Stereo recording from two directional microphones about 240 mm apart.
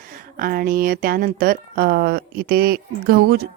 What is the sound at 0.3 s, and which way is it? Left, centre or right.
Speech, right.